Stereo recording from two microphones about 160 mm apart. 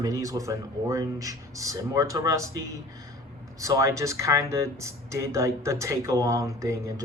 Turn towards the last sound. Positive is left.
turn(degrees=-20)  # may be behind; listen again after turning